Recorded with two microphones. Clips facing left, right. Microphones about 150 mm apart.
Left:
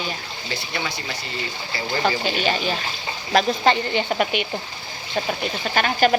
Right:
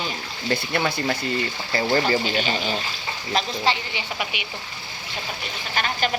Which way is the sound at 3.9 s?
50° left (ahead or behind).